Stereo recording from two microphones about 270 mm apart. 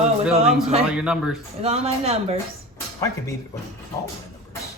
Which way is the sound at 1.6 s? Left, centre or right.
Right.